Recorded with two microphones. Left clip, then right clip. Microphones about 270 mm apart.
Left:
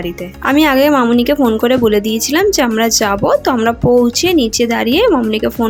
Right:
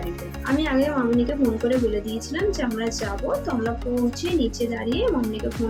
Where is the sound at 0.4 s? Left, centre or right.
Left.